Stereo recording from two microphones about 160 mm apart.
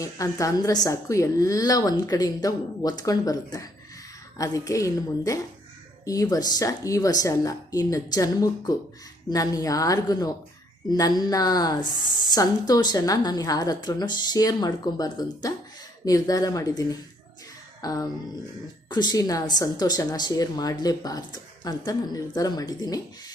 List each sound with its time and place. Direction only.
0.0 s speech: 20° left (ahead or behind)